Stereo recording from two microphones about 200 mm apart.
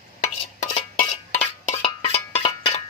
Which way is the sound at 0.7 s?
30° left (ahead or behind).